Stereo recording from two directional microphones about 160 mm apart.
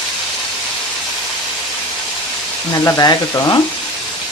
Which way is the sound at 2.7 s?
20° left (ahead or behind).